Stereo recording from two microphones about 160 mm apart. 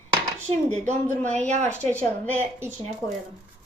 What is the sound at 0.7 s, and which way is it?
A woman's voice, 45° right (ahead or behind).